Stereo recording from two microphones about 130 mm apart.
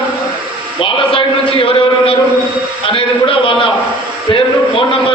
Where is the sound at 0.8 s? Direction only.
40° left (ahead or behind).